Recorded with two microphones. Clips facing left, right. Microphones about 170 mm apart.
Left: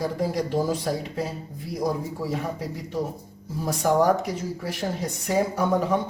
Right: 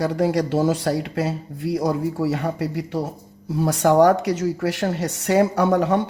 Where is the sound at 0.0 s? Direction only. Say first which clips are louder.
Right 6 dB; 80° right.